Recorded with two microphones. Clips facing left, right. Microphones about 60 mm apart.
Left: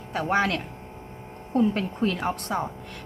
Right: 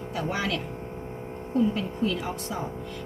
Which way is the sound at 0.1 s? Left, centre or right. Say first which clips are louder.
Left 5 dB; left.